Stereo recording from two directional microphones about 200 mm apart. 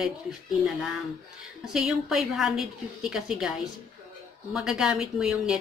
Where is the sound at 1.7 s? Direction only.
Centre (ahead or behind).